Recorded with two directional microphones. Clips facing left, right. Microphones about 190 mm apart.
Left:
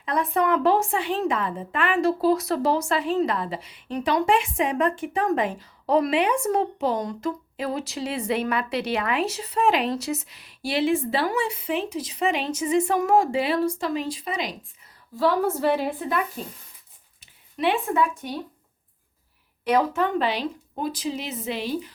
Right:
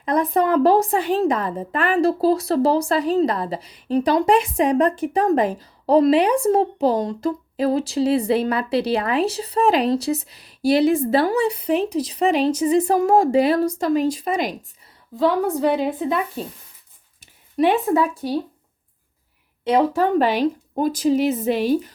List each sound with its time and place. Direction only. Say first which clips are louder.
0.0 s a woman's voice: right 5 dB; 40° right (ahead or behind)
15.1 s a woman's voice: right 3 dB; 15° right (ahead or behind)
17.6 s a woman's voice: right 5 dB; 40° right (ahead or behind)
19.6 s speech: right 4 dB; 25° right (ahead or behind); by 21.9 s 45° right (ahead or behind)